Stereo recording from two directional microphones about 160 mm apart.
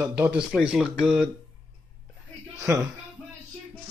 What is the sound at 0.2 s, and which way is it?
Speech, 5° right (ahead or behind).